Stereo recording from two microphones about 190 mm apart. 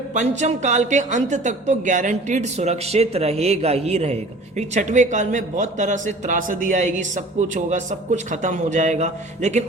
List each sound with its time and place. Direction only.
0.1 s a woman's voice: 40° right (ahead or behind)